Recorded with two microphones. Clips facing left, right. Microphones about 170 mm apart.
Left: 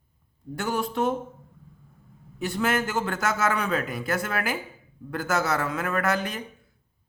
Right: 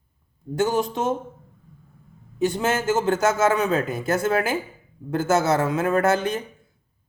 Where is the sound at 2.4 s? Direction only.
20° right (ahead or behind).